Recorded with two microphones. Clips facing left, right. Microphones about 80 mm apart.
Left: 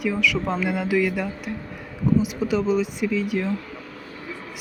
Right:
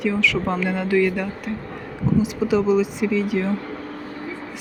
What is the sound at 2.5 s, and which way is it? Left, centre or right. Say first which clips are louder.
Speech: right 4 dB; centre.